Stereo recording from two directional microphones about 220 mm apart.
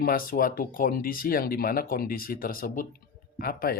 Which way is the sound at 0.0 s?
40° left (ahead or behind).